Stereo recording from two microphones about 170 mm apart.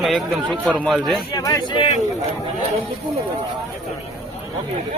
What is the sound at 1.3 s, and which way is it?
Speech, 20° left (ahead or behind).